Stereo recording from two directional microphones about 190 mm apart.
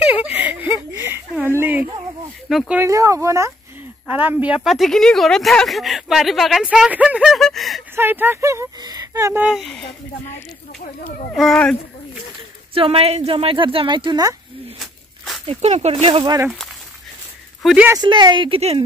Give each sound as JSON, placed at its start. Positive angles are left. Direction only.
{"t": 0.0, "sound": "a sound", "side_deg": -10}
{"t": 2.5, "sound": "a woman's voice", "side_deg": 0}
{"t": 2.8, "sound": "a woman's voice", "side_deg": -15}
{"t": 7.9, "sound": "speech", "side_deg": -10}
{"t": 9.5, "sound": "a woman's voice", "side_deg": 0}
{"t": 11.1, "sound": "a woman's voice", "side_deg": 5}
{"t": 12.7, "sound": "speech", "side_deg": -30}
{"t": 14.8, "sound": "a sound", "side_deg": 0}
{"t": 15.4, "sound": "speech", "side_deg": -35}
{"t": 17.6, "sound": "speech", "side_deg": -5}
{"t": 17.9, "sound": "speech", "side_deg": -25}